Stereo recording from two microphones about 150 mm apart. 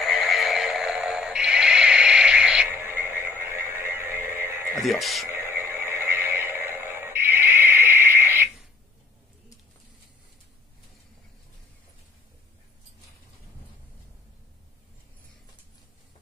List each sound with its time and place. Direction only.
0.0 s neigh: centre (ahead or behind); by 4.8 s 15° right (ahead or behind)
4.8 s speech: centre (ahead or behind)
5.3 s a sound: 15° right (ahead or behind)